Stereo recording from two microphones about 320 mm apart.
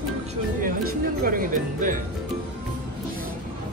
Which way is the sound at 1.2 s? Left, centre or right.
Right.